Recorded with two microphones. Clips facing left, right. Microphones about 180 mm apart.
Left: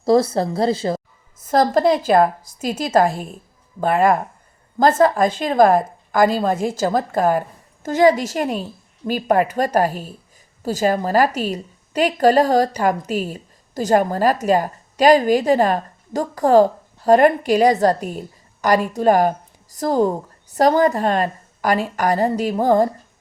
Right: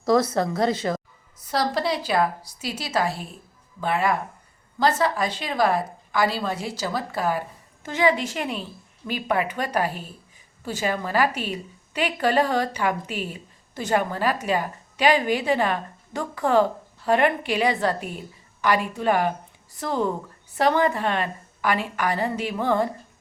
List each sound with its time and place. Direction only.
0.0 s speech: 30° left (ahead or behind)
1.4 s a woman's voice: 50° left (ahead or behind)